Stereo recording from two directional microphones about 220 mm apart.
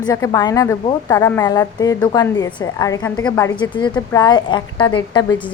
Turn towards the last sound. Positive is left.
turn(degrees=20)  # may be behind; listen again after turning